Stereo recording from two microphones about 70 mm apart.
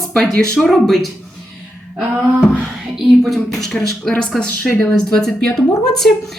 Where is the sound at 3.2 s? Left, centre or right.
Centre.